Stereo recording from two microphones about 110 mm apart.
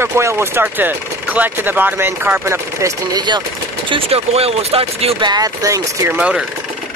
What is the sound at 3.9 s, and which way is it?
Speech, 60° right (ahead or behind).